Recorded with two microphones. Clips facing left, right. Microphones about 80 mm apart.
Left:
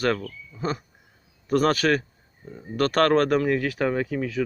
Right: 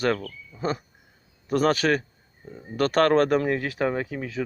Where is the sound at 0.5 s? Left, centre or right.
Centre.